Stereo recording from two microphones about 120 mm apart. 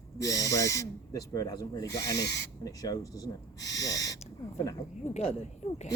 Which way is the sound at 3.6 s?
30° left (ahead or behind).